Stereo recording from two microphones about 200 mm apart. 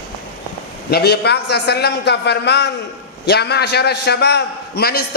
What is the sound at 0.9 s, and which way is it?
A man's voice, 50° left (ahead or behind).